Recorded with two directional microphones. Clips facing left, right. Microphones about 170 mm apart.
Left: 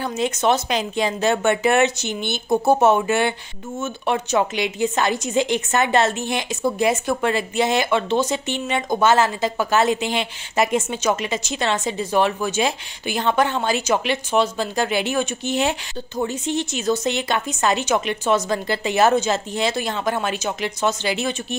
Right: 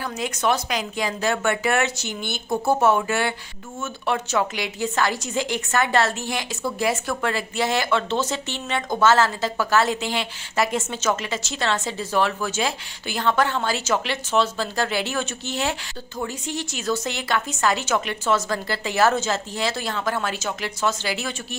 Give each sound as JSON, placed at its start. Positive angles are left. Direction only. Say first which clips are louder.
{"t": 0.0, "sound": "a woman's voice", "louder": "left 4 dB", "side_deg": 25}